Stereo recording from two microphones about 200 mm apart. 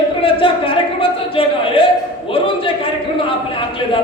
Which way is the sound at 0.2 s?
25° left (ahead or behind).